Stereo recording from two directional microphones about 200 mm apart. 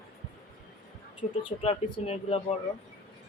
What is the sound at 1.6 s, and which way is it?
Speech, 30° left (ahead or behind).